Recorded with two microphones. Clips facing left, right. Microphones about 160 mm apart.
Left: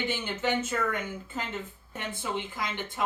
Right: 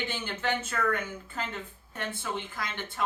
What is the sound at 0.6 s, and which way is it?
Speech, 20° left (ahead or behind).